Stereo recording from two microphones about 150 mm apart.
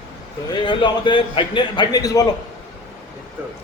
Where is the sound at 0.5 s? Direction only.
30° left (ahead or behind).